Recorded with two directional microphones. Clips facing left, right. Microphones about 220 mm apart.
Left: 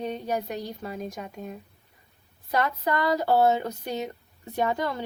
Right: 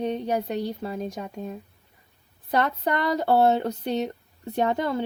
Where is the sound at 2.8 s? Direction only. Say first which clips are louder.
Right 1 dB; 30° right (ahead or behind).